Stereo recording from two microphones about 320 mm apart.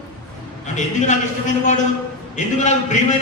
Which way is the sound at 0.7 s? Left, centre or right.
Left.